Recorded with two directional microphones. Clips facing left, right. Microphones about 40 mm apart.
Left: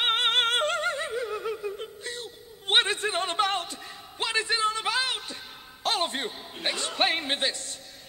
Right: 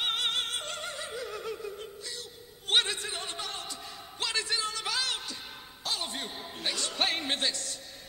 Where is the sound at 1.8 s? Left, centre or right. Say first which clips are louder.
Left 5 dB; left.